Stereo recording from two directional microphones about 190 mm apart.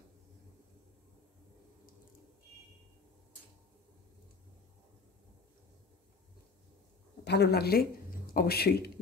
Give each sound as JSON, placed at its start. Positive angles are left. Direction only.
{"t": 7.2, "sound": "speech", "side_deg": 60}